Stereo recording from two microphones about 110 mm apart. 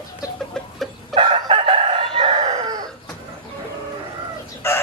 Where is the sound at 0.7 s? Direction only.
Centre (ahead or behind).